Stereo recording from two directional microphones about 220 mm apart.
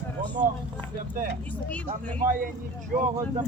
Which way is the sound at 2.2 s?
40° right (ahead or behind).